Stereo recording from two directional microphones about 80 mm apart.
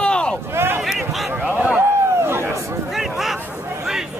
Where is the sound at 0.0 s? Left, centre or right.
Centre.